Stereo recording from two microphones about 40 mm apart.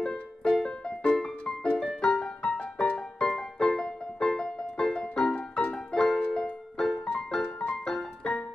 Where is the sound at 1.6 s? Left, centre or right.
Left.